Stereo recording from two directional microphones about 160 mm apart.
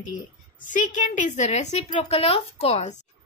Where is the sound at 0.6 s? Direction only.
50° left (ahead or behind).